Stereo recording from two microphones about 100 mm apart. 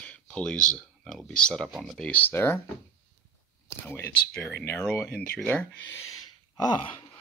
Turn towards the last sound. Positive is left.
turn(degrees=50)  # may be behind; listen again after turning